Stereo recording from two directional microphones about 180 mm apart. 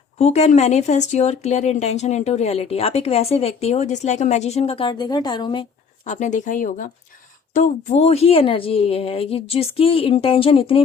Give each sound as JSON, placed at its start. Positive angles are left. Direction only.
{"t": 0.2, "sound": "speech", "side_deg": 40}
{"t": 6.1, "sound": "speech", "side_deg": 40}